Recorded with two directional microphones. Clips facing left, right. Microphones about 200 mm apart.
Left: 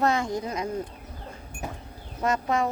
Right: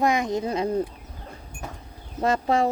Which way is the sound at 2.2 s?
30° right (ahead or behind).